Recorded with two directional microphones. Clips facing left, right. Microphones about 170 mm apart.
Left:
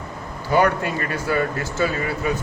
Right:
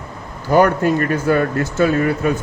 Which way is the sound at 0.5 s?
45° right (ahead or behind).